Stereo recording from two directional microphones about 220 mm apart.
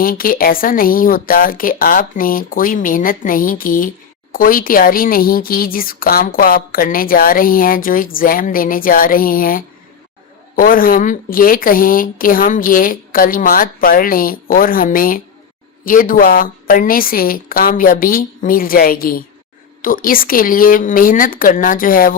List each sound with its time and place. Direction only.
0.0 s speech: 40° left (ahead or behind)